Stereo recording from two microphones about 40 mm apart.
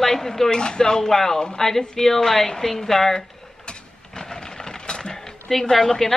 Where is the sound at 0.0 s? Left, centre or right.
Centre.